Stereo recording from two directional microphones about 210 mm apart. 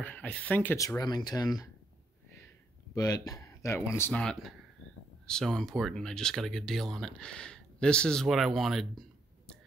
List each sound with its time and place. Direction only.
0.0 s speech: 5° left (ahead or behind)
2.9 s speech: 15° left (ahead or behind); by 9.0 s centre (ahead or behind)